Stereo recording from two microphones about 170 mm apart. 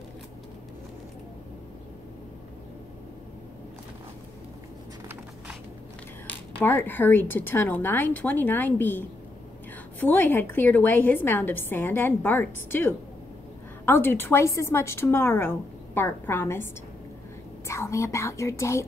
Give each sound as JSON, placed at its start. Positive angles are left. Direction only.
{"t": 6.2, "sound": "a woman's voice", "side_deg": 10}
{"t": 17.6, "sound": "a woman's voice", "side_deg": 15}